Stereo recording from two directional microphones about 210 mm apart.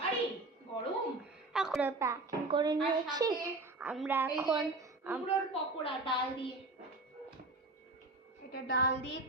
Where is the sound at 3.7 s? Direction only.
5° right (ahead or behind).